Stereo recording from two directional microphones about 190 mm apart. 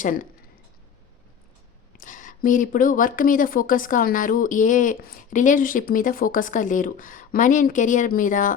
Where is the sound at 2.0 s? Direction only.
45° left (ahead or behind).